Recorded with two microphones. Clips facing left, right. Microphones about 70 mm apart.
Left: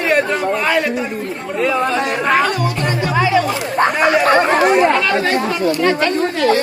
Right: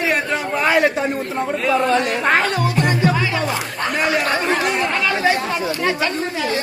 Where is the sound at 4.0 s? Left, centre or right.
Left.